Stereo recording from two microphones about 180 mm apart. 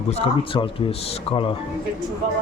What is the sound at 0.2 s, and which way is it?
Speech, 30° left (ahead or behind).